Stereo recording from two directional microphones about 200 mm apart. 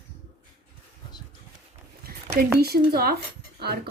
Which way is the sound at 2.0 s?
50° right (ahead or behind).